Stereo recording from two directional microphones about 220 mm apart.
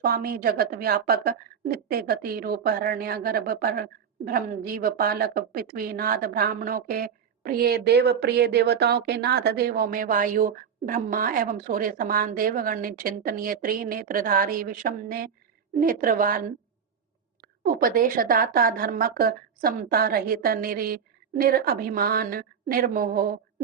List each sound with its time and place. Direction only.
0.0 s a woman's voice: 45° right (ahead or behind)
17.6 s a woman's voice: 40° right (ahead or behind)